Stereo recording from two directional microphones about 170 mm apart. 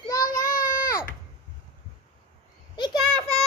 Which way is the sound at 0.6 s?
55° left (ahead or behind).